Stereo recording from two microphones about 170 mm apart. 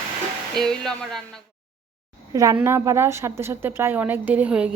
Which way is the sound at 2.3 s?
20° right (ahead or behind).